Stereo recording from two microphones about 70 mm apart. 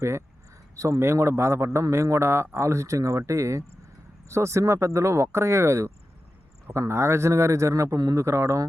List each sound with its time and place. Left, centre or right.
0.8 s a man's voice: right